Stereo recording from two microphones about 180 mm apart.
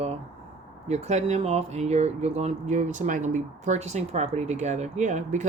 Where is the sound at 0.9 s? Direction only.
40° right (ahead or behind).